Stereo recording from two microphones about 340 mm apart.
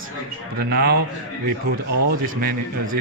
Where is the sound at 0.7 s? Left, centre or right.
Right.